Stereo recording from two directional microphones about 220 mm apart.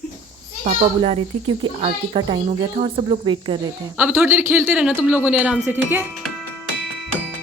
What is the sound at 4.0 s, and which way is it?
A man's voice, 10° right (ahead or behind).